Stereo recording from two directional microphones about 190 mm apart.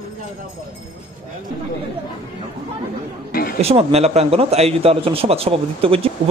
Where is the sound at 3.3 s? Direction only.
50° left (ahead or behind).